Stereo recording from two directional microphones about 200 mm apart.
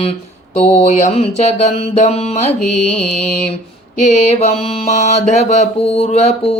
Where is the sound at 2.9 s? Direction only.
5° left (ahead or behind).